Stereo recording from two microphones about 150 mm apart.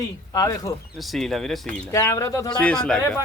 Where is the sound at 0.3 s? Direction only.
25° left (ahead or behind).